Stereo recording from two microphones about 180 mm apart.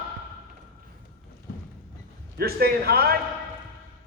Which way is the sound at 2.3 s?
60° right (ahead or behind).